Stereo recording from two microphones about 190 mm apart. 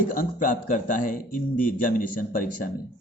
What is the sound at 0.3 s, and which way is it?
Speech, 45° left (ahead or behind).